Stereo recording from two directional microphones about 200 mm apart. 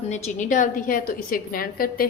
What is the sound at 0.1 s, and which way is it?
A woman's voice, 40° left (ahead or behind).